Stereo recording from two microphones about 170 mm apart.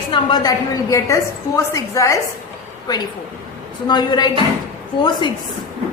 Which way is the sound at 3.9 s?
25° left (ahead or behind).